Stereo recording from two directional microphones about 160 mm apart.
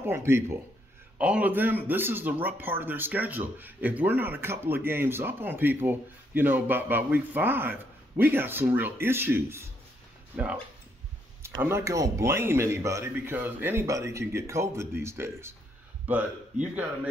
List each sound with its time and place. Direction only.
0.0 s speech: 15° right (ahead or behind)